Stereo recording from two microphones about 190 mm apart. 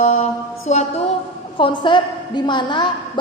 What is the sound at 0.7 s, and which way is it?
Speech, 40° left (ahead or behind).